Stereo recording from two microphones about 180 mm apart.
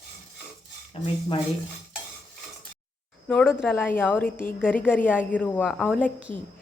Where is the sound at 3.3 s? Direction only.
10° left (ahead or behind).